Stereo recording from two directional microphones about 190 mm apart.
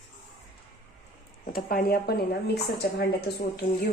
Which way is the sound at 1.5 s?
50° left (ahead or behind).